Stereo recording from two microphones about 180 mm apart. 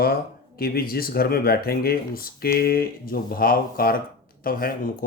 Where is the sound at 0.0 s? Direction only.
55° left (ahead or behind).